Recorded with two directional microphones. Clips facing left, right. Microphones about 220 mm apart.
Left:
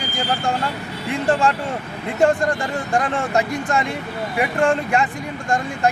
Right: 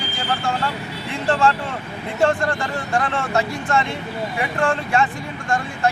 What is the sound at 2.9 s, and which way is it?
Speech, 15° left (ahead or behind).